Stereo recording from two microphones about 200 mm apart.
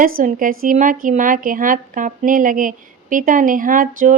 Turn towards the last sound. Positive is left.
turn(degrees=-40)  # may be behind; listen again after turning